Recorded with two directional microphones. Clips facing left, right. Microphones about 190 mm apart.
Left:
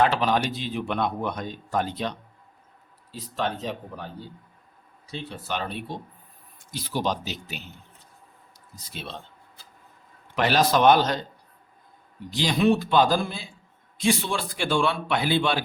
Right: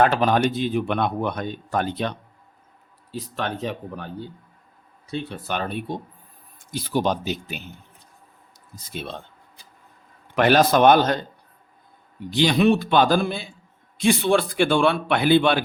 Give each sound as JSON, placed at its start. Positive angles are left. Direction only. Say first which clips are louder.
{"t": 0.0, "sound": "speech", "louder": "right 4 dB", "side_deg": -50}
{"t": 5.1, "sound": "speech", "louder": "right 4 dB", "side_deg": -55}
{"t": 8.7, "sound": "speech", "louder": "right 5 dB", "side_deg": -50}
{"t": 10.3, "sound": "speech", "louder": "right 5 dB", "side_deg": -55}
{"t": 12.3, "sound": "speech", "louder": "right 3 dB", "side_deg": -65}